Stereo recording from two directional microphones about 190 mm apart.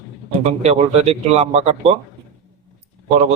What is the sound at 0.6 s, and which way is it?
A man's voice, 35° right (ahead or behind).